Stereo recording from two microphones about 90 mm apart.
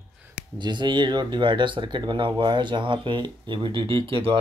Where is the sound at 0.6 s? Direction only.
60° right (ahead or behind).